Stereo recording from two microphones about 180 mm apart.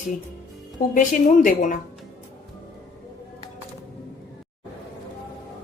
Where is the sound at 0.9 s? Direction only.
50° left (ahead or behind).